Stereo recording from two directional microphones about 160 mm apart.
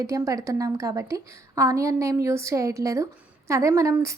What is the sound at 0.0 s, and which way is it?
A woman's voice, 20° right (ahead or behind).